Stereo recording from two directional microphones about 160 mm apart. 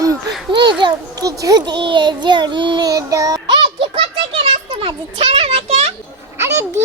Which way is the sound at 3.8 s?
35° right (ahead or behind).